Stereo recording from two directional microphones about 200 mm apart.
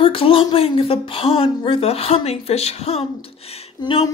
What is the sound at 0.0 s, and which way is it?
A woman's voice, 25° left (ahead or behind).